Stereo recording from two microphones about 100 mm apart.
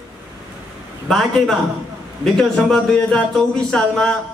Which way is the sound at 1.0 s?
5° left (ahead or behind).